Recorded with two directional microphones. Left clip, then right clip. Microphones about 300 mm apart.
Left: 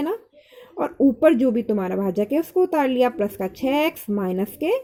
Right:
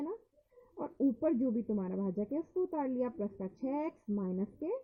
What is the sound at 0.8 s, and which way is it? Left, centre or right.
Speech, left.